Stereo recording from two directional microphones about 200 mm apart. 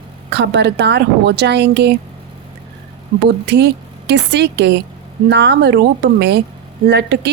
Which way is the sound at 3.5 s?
60° right (ahead or behind).